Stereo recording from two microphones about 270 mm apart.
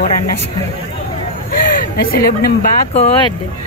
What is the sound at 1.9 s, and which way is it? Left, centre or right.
Speech, left.